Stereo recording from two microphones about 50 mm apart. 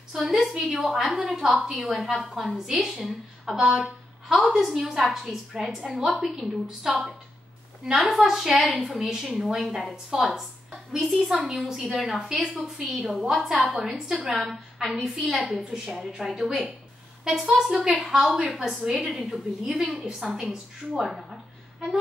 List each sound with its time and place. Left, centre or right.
0.1 s a woman's voice: centre
8.1 s a woman's voice: centre
12.9 s a woman's voice: centre
15.7 s a woman's voice: centre
17.5 s a woman's voice: centre